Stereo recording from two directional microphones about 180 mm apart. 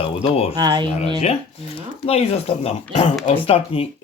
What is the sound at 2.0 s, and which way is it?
Speech, 35° left (ahead or behind).